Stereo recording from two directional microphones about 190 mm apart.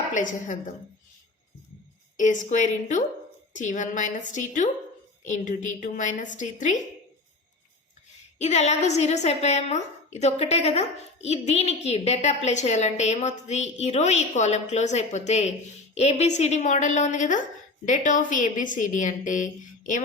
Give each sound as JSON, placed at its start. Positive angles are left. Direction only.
{"t": 0.1, "sound": "a woman's voice", "side_deg": 40}
{"t": 2.1, "sound": "a woman's voice", "side_deg": 40}
{"t": 8.4, "sound": "a woman's voice", "side_deg": 35}